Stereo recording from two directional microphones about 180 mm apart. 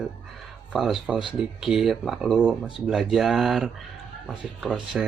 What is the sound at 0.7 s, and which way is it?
Speech, centre (ahead or behind).